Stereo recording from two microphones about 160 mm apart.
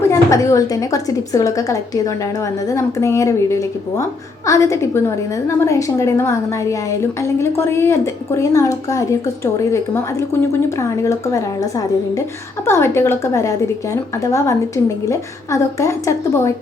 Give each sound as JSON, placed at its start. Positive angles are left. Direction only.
{"t": 0.0, "sound": "a woman's voice", "side_deg": 20}